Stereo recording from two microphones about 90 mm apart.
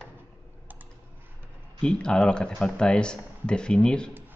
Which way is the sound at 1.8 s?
10° left (ahead or behind).